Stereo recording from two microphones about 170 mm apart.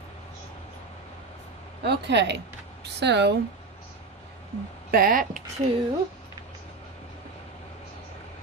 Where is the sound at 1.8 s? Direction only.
80° right.